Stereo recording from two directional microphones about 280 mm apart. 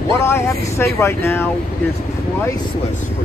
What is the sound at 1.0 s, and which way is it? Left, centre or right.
Speech, centre.